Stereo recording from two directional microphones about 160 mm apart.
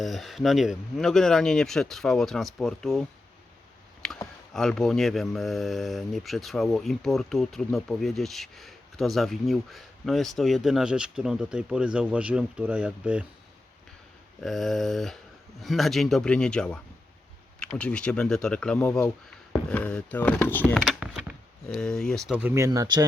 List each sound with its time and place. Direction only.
0.0 s speech: centre (ahead or behind)
4.0 s a sound: 5° left (ahead or behind)
4.5 s speech: 5° left (ahead or behind)
14.4 s speech: centre (ahead or behind)
21.0 s chop: 5° right (ahead or behind)
22.4 s speech: 15° right (ahead or behind)